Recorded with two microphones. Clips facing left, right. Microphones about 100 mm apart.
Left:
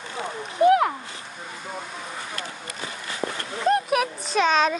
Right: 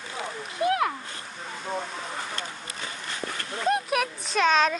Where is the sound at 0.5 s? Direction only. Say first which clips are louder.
Left 7 dB; 25° left (ahead or behind).